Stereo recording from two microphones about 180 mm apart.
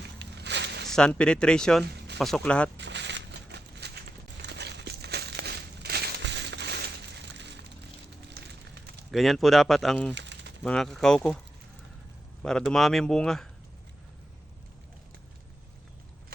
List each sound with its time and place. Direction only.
0.2 s walk: 70° right (ahead or behind)
0.9 s speech: 5° left (ahead or behind)
2.7 s a sound: 75° right (ahead or behind)
4.4 s crumpling: 70° right (ahead or behind)
8.3 s fire: 65° right (ahead or behind)
9.1 s speech: centre (ahead or behind)
10.2 s a sound: 75° right (ahead or behind)
10.6 s speech: centre (ahead or behind)
12.4 s speech: 5° left (ahead or behind)